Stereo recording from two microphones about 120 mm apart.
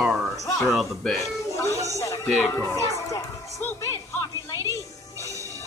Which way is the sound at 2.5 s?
25° left (ahead or behind).